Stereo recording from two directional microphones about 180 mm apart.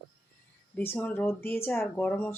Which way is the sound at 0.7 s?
10° left (ahead or behind).